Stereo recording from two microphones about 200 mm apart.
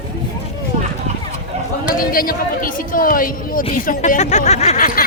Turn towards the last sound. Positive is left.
turn(degrees=45)  # may be behind; listen again after turning